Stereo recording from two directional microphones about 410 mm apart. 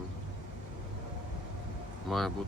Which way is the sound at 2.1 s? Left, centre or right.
Centre.